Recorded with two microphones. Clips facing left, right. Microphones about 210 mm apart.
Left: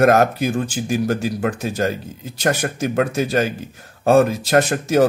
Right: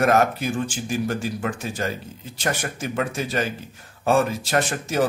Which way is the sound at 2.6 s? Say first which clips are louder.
Left 7 dB; 55° left (ahead or behind).